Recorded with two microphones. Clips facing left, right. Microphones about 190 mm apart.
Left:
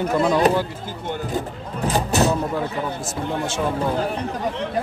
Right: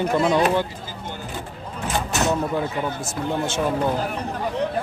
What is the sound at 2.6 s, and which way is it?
Speech, centre (ahead or behind).